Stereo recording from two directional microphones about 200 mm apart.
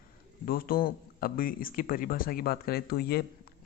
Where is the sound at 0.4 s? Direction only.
45° left (ahead or behind).